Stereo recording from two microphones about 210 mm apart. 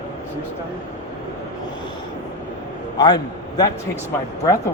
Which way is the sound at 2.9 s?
20° left (ahead or behind).